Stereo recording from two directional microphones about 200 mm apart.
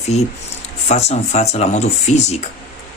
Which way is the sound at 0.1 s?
30° left (ahead or behind).